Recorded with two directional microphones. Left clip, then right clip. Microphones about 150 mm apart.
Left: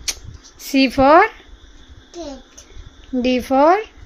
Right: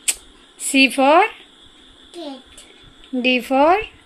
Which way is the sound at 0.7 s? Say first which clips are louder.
Left 1 dB; 20° left (ahead or behind).